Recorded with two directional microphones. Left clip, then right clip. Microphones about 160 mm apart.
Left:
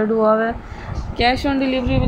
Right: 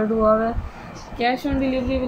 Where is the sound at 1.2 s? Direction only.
60° left (ahead or behind).